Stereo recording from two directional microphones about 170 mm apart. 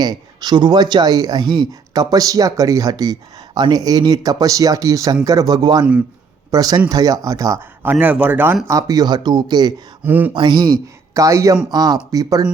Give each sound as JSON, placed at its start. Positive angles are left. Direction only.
{"t": 0.0, "sound": "speech", "side_deg": -25}
{"t": 8.6, "sound": "speech", "side_deg": -20}
{"t": 10.0, "sound": "speech", "side_deg": -10}
{"t": 10.3, "sound": "speech", "side_deg": -25}